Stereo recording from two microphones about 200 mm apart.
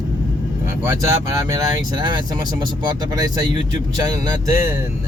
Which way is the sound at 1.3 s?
20° right (ahead or behind).